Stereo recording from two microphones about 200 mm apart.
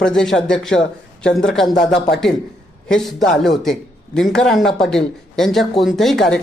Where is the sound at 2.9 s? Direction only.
Centre (ahead or behind).